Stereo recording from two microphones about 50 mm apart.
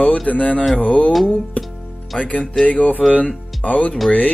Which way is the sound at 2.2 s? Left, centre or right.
Left.